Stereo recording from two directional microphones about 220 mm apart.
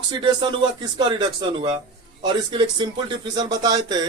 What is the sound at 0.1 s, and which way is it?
Speech, 20° right (ahead or behind).